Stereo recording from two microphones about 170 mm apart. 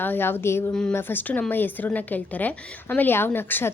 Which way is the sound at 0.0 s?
10° left (ahead or behind).